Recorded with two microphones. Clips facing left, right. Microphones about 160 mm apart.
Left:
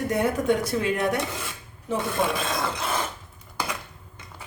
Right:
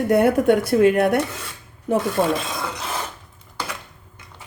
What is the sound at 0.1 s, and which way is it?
Speech, 60° right (ahead or behind).